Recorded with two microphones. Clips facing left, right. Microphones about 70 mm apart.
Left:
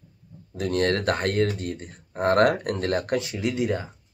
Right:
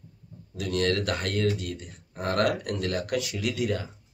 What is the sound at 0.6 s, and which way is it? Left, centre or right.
Speech, left.